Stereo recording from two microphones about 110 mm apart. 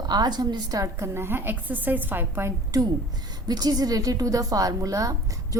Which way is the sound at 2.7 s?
35° right (ahead or behind).